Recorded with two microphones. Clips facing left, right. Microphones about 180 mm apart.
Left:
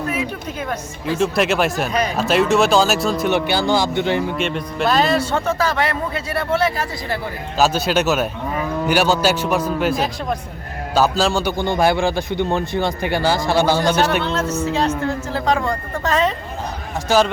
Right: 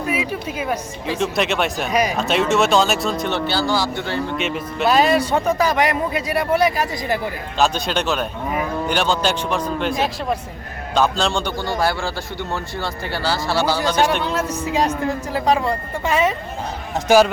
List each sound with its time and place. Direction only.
0.1 s speech: 10° right (ahead or behind)
1.2 s speech: centre (ahead or behind)
1.9 s speech: 10° right (ahead or behind)
2.1 s speech: centre (ahead or behind)
3.3 s a man's voice: 15° left (ahead or behind)
4.4 s speech: centre (ahead or behind); by 7.2 s 15° right (ahead or behind)
7.6 s a man's voice: 5° left (ahead or behind)
11.5 s a man's voice: 20° left (ahead or behind)
14.3 s speech: 10° right (ahead or behind)